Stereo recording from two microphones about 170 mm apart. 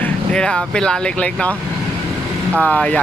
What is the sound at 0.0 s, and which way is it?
Speech, 5° left (ahead or behind).